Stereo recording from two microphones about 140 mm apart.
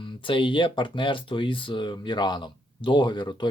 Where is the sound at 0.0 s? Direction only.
35° left (ahead or behind).